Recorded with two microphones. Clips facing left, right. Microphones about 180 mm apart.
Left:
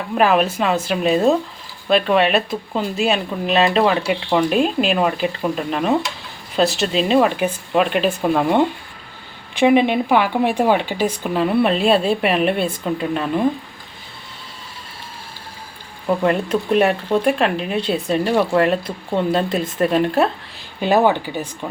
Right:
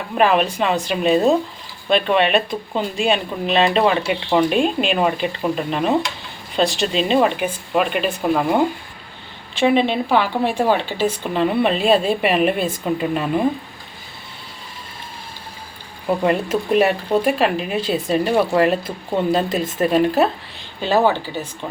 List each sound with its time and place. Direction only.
0.2 s speech: 5° left (ahead or behind)
9.6 s speech: 15° left (ahead or behind)
11.2 s speech: centre (ahead or behind)
16.0 s speech: 5° right (ahead or behind)
20.8 s speech: 15° left (ahead or behind)